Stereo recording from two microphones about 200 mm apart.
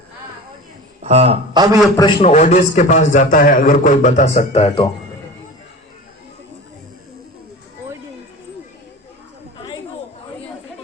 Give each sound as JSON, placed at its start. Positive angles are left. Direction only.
{"t": 1.0, "sound": "a sound", "side_deg": -30}
{"t": 2.0, "sound": "a man's voice", "side_deg": 20}
{"t": 2.2, "sound": "a man's voice", "side_deg": 35}